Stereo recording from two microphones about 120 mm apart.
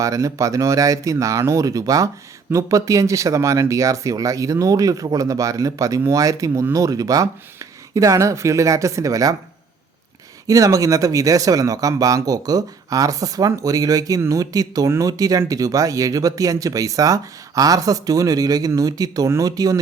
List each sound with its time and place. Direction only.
0.0 s speech: 25° right (ahead or behind)
10.4 s speech: 30° right (ahead or behind)